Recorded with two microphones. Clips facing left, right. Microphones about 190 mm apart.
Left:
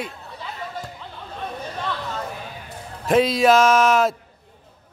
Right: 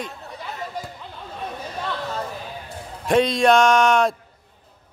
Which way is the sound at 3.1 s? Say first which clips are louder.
Left 1 dB; 5° left (ahead or behind).